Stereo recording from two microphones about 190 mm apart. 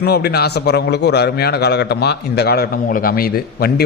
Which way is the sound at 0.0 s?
55° left (ahead or behind).